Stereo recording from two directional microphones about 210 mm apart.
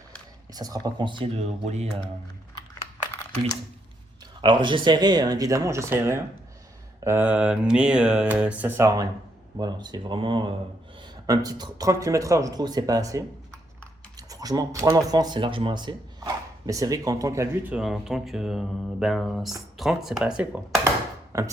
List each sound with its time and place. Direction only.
0.5 s speech: 20° right (ahead or behind)
4.4 s speech: 20° right (ahead or behind)
7.0 s mantra: 10° right (ahead or behind)
9.6 s speech: 20° right (ahead or behind); by 19.5 s centre (ahead or behind)
19.7 s mantra: centre (ahead or behind)
21.3 s speech: 15° right (ahead or behind)